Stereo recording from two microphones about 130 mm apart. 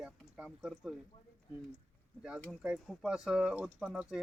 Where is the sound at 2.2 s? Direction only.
5° right (ahead or behind).